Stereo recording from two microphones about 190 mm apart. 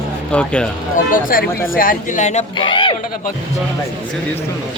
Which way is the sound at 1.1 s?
45° left (ahead or behind).